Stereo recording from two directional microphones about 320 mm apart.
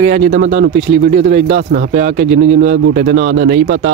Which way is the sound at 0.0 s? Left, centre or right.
Right.